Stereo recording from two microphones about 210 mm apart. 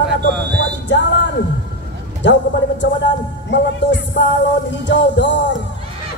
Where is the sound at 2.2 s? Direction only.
55° left (ahead or behind).